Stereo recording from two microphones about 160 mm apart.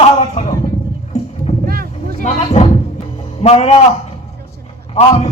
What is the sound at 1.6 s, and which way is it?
Boat, 70° right (ahead or behind).